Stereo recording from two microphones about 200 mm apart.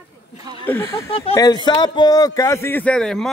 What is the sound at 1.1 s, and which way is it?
A man's voice, 20° left (ahead or behind).